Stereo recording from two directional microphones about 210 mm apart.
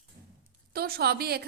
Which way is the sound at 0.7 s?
45° right (ahead or behind).